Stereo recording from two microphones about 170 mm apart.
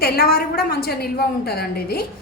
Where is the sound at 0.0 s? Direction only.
65° left (ahead or behind).